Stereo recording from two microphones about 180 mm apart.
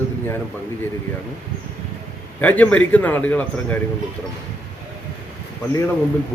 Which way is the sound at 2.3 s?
10° left (ahead or behind).